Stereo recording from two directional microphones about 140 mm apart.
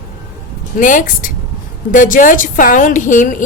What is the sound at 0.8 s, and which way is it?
A woman's voice, 70° left (ahead or behind).